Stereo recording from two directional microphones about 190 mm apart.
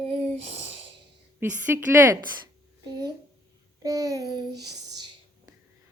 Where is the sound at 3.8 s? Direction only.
15° right (ahead or behind).